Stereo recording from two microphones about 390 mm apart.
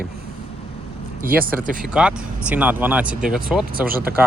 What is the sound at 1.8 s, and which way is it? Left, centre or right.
Speech, centre.